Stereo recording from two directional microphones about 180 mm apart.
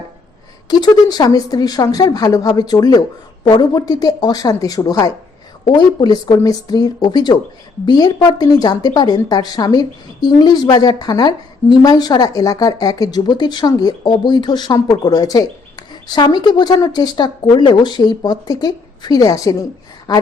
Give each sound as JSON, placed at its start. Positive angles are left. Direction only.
{"t": 0.7, "sound": "speech", "side_deg": 20}